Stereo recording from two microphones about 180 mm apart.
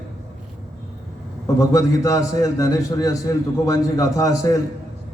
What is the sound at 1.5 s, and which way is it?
A man's voice, 15° left (ahead or behind).